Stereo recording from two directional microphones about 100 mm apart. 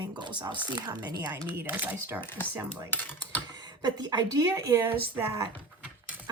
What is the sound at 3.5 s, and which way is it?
A woman's voice, 40° right (ahead or behind).